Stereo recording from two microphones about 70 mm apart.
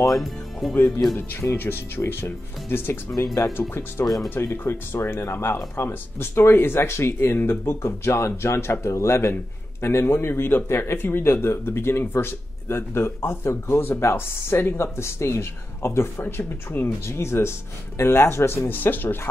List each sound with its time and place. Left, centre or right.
0.1 s speech: centre
0.7 s a man's voice: left